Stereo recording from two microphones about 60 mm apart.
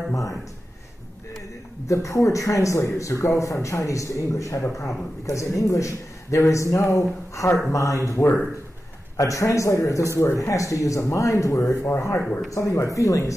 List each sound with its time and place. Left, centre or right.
0.1 s a man's voice: left
1.9 s a man's voice: left
9.1 s a man's voice: left
12.2 s speech: centre
12.4 s a man's voice: left